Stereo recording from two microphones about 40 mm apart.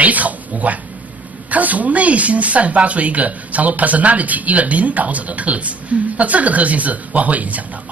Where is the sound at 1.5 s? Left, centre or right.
Right.